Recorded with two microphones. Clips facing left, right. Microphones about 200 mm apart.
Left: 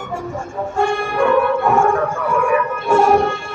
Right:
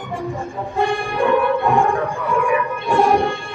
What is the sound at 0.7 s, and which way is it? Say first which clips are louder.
Music: left 2 dB; 15° right (ahead or behind).